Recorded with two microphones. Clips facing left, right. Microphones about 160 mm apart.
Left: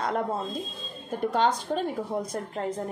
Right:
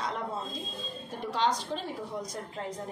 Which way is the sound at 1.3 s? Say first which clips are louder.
Left 4 dB; 50° left (ahead or behind).